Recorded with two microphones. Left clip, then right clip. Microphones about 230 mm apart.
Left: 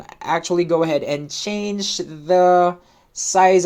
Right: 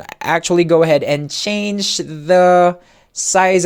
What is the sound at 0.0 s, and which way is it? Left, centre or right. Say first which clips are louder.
Speech: right 5 dB; right.